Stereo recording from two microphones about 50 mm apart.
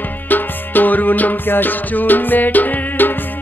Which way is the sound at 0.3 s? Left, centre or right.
Left.